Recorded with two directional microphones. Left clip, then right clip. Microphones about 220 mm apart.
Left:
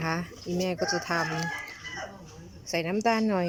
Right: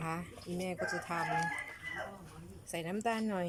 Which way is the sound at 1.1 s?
15° left (ahead or behind).